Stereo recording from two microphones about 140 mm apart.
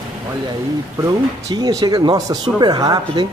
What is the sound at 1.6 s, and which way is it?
Speech, 25° right (ahead or behind).